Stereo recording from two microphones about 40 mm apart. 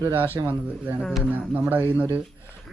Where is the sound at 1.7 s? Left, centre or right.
Right.